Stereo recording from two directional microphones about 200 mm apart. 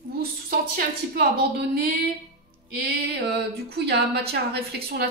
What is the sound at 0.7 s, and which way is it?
A woman's voice, 50° right (ahead or behind).